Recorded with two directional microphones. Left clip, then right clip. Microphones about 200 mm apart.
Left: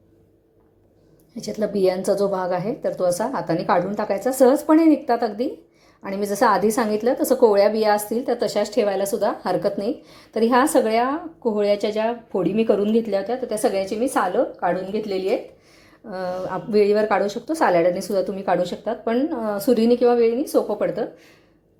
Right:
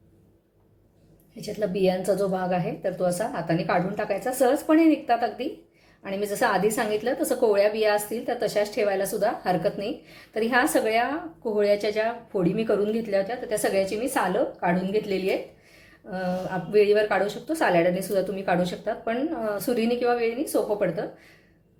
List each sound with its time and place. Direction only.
1.4 s a woman's voice: 30° left (ahead or behind)
16.0 s a woman's voice: 30° left (ahead or behind)